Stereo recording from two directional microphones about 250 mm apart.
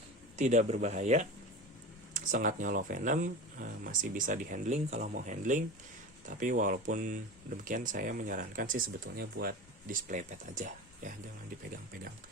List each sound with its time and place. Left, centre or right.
0.3 s speech: right